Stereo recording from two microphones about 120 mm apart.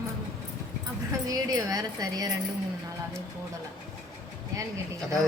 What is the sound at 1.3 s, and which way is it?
A woman's voice, 30° right (ahead or behind).